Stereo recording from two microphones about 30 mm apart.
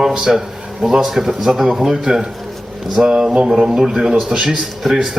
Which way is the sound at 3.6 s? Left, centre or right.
Centre.